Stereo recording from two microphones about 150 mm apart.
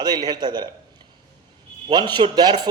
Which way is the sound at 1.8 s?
30° right (ahead or behind).